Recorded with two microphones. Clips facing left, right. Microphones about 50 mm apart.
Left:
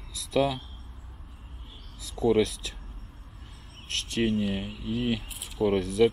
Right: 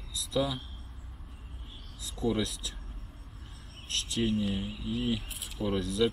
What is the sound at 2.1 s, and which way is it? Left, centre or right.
Speech, left.